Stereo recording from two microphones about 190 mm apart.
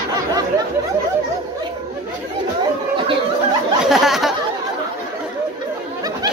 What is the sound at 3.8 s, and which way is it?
Speech, centre (ahead or behind).